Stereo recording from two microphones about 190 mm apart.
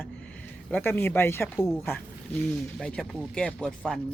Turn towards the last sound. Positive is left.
turn(degrees=5)  # may be behind; listen again after turning